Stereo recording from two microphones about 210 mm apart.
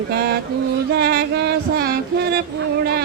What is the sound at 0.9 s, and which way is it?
Music, 50° right (ahead or behind).